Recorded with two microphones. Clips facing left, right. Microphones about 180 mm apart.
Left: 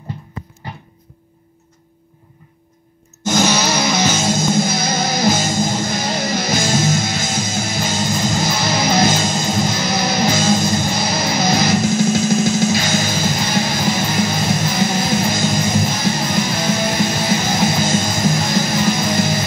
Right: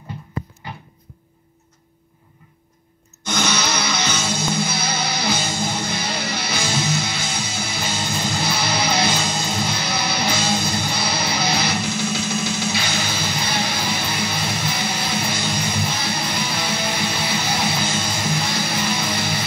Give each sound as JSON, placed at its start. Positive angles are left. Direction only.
{"t": 3.3, "sound": "music", "side_deg": 45}